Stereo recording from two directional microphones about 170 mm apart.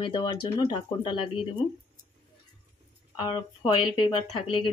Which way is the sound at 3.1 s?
25° left (ahead or behind).